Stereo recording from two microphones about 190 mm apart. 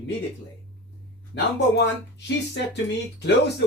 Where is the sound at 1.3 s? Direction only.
65° left (ahead or behind).